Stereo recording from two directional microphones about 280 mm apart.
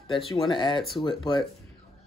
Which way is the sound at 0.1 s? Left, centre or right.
Centre.